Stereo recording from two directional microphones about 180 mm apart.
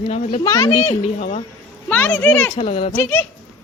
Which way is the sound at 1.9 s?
10° left (ahead or behind).